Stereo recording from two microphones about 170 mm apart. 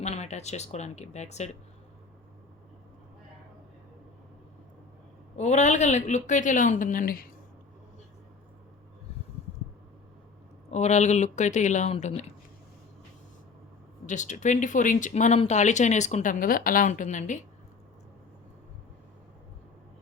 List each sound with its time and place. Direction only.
0.0 s speech: 40° left (ahead or behind)
5.4 s speech: 45° left (ahead or behind)
10.7 s speech: 40° left (ahead or behind)
14.1 s speech: 45° left (ahead or behind)